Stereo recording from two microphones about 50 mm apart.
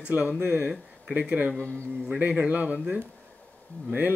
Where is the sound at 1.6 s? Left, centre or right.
Left.